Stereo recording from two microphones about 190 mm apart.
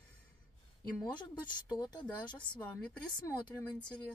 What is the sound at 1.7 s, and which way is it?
Speech, 20° left (ahead or behind).